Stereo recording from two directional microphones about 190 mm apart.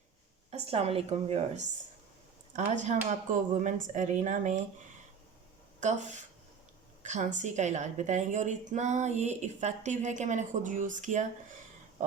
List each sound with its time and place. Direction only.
0.5 s a woman's voice: 30° right (ahead or behind)
5.8 s a woman's voice: 40° right (ahead or behind)